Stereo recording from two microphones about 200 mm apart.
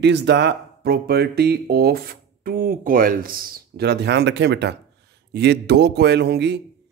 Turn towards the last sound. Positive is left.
turn(degrees=-55)  # may be behind; listen again after turning